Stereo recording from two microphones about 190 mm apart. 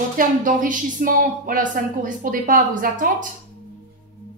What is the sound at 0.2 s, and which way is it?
A woman's voice, 45° right (ahead or behind).